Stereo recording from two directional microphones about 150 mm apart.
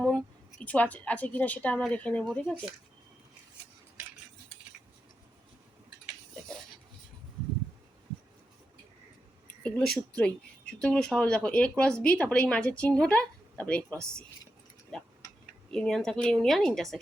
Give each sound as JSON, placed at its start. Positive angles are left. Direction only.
{"t": 0.6, "sound": "a woman's voice", "side_deg": 10}
{"t": 9.6, "sound": "a woman's voice", "side_deg": 5}
{"t": 15.7, "sound": "speech", "side_deg": 5}